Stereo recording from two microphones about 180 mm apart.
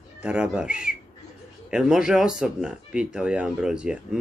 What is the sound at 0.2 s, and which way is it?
Speech, 5° right (ahead or behind).